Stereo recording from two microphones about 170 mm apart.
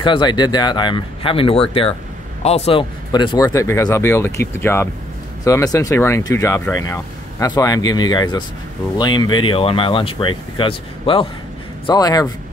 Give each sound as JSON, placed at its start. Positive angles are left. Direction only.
{"t": 0.0, "sound": "speech", "side_deg": 30}